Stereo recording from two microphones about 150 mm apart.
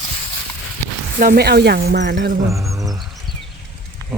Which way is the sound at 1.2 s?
80° right.